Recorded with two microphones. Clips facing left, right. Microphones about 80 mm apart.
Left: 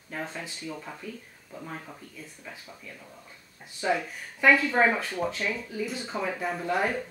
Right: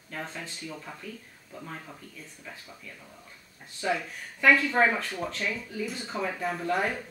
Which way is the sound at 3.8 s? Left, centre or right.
Centre.